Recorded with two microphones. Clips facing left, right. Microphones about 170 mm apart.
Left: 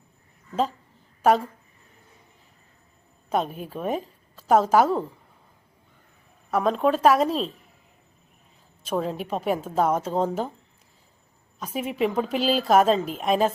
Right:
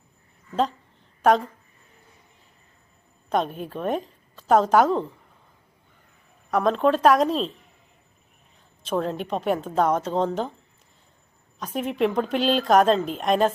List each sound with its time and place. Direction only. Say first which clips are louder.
1.2 s speech: right 1 dB; 5° left (ahead or behind)
3.2 s a woman's voice: right 1 dB; 5° left (ahead or behind)
6.5 s speech: right 1 dB; 5° left (ahead or behind)
8.8 s a woman's voice: right 1 dB; 5° left (ahead or behind)
11.6 s speech: right 2 dB; 5° left (ahead or behind)